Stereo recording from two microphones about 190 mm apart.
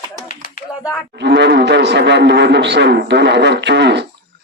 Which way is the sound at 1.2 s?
65° right (ahead or behind).